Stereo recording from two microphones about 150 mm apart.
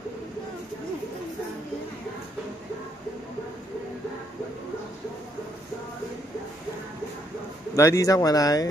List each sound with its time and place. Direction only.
7.7 s speech: 20° left (ahead or behind)